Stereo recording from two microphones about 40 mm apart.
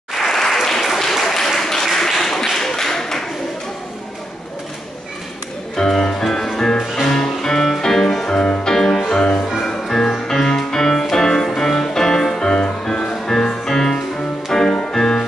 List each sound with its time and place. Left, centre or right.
0.1 s applause: centre
5.8 s music: centre
9.8 s music: centre